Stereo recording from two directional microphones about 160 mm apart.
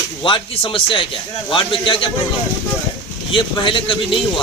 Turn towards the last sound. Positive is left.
turn(degrees=30)  # may be behind; listen again after turning